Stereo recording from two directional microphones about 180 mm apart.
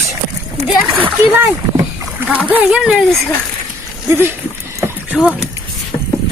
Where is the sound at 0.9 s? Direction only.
10° right (ahead or behind).